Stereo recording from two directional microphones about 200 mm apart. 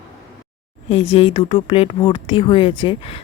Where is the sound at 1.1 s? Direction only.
25° left (ahead or behind).